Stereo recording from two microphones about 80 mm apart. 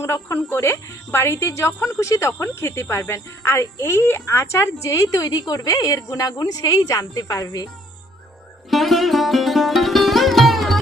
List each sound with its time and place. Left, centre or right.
0.0 s speech: left
8.7 s sitar: centre